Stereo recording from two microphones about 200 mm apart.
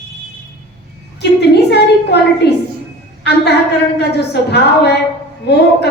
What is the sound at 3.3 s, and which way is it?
Female singing, 55° left (ahead or behind).